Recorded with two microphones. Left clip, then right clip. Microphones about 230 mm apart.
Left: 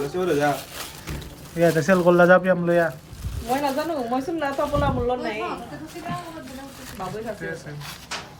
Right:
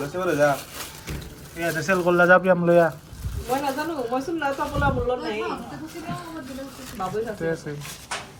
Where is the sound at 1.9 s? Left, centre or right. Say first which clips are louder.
Even; centre.